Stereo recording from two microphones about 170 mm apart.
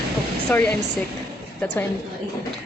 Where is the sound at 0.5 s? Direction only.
10° left (ahead or behind).